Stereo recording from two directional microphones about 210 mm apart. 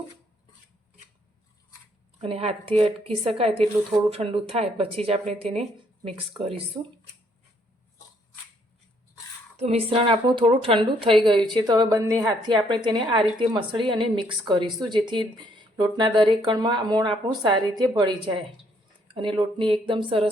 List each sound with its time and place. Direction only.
2.2 s a woman's voice: 30° right (ahead or behind)
6.8 s speech: 15° right (ahead or behind)
9.6 s a woman's voice: 30° right (ahead or behind)